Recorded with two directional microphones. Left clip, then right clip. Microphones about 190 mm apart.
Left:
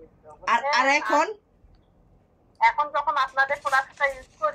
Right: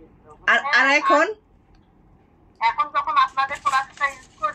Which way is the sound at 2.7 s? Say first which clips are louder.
Right 1 dB; 25° left (ahead or behind).